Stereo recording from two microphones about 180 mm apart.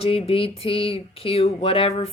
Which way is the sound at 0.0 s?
30° left (ahead or behind).